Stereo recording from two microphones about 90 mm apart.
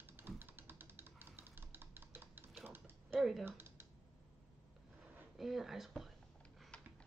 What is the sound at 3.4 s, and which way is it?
Computer keyboard, 25° right (ahead or behind).